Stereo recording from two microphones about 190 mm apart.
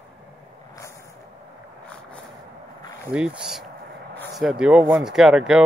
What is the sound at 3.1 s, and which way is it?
Speech, 5° right (ahead or behind).